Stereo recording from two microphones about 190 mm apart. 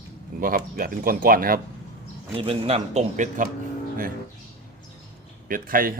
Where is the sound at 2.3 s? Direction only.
30° right (ahead or behind).